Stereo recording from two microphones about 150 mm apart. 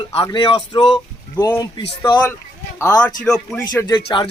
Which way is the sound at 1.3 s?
15° left (ahead or behind).